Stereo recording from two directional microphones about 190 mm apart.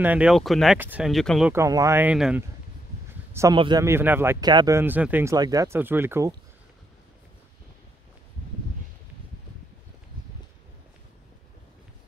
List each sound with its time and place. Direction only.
0.0 s speech: 5° right (ahead or behind)
1.5 s speech: 15° right (ahead or behind)
3.5 s speech: 20° right (ahead or behind)